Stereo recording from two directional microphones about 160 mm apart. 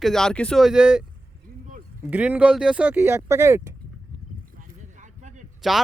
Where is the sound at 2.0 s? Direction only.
10° right (ahead or behind).